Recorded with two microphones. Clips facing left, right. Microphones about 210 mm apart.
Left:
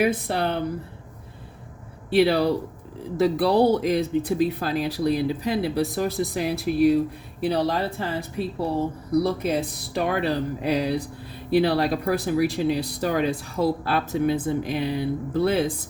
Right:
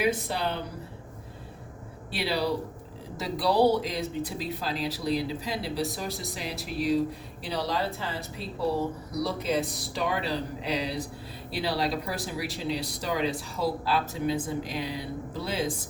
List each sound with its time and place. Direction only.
0.0 s speech: 60° left (ahead or behind)
2.0 s speech: 55° left (ahead or behind)